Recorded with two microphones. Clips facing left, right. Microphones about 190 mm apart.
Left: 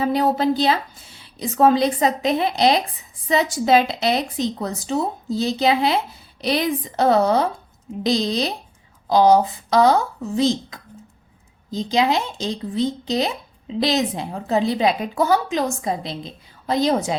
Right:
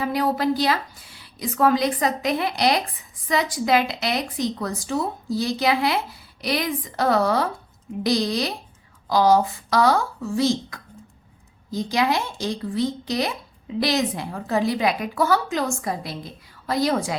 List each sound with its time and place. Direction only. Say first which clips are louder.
0.0 s speech: left 3 dB; 25° left (ahead or behind)